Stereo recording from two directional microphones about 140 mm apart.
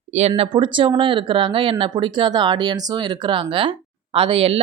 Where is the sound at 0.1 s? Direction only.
50° right (ahead or behind).